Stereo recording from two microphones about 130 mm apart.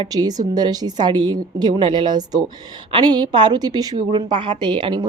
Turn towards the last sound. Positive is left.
turn(degrees=-35)  # may be behind; listen again after turning